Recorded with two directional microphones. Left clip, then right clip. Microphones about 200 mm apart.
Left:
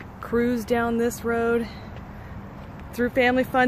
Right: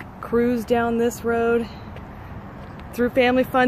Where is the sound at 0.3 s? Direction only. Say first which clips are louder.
Right 3 dB; centre (ahead or behind).